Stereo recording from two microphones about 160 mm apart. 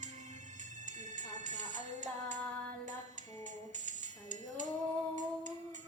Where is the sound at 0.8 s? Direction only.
50° right (ahead or behind).